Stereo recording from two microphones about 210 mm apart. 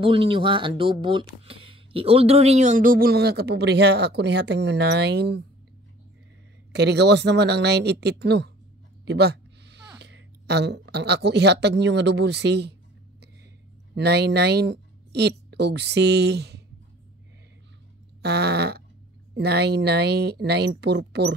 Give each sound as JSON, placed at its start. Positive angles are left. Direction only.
{"t": 0.0, "sound": "speech", "side_deg": -25}
{"t": 6.7, "sound": "speech", "side_deg": -55}
{"t": 13.9, "sound": "speech", "side_deg": -50}
{"t": 18.2, "sound": "speech", "side_deg": -50}